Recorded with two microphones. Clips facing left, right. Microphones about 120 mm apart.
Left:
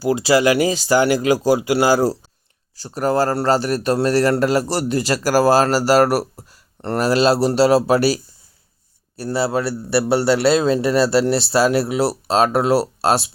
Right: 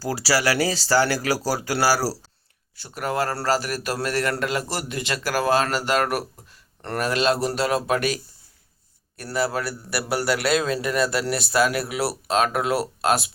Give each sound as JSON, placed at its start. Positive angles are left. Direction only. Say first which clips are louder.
{"t": 0.0, "sound": "a man's voice", "louder": "left 7 dB", "side_deg": 20}
{"t": 2.7, "sound": "a man's voice", "louder": "left 7 dB", "side_deg": 35}